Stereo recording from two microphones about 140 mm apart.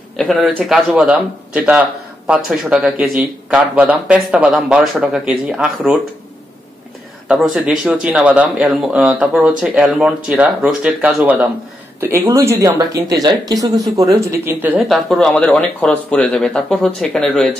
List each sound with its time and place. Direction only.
0.2 s speech: 5° left (ahead or behind)
7.2 s speech: 5° right (ahead or behind)
12.0 s speech: 20° right (ahead or behind)
14.1 s speech: 15° right (ahead or behind)
14.8 s speech: centre (ahead or behind)